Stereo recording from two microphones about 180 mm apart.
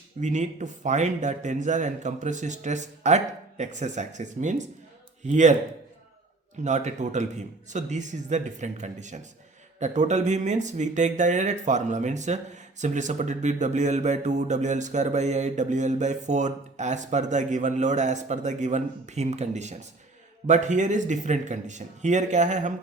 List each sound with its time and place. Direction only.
0.2 s speech: 40° right (ahead or behind)
6.7 s speech: 40° right (ahead or behind)